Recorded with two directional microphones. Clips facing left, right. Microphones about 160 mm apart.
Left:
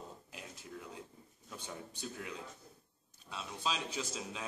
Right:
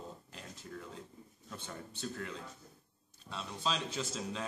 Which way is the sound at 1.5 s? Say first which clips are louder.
Even; 10° left (ahead or behind).